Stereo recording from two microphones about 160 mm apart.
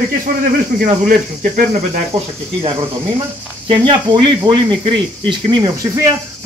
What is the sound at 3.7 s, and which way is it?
Speech, 30° right (ahead or behind).